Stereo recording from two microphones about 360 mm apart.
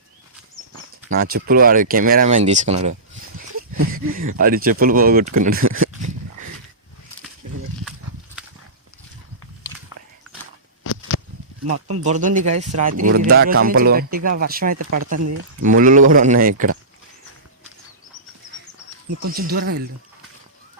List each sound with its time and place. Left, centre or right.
1.1 s speech: right
2.9 s a sound: right
3.9 s speech: right
11.6 s speech: right
12.0 s speech: right
13.7 s speech: right
19.3 s speech: right